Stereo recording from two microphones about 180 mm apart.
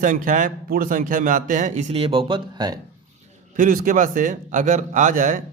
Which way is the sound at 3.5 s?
50° right (ahead or behind).